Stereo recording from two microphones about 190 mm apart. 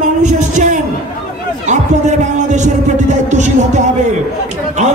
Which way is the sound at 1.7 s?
40° right (ahead or behind).